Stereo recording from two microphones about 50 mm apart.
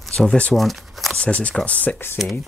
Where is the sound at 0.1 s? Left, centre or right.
Centre.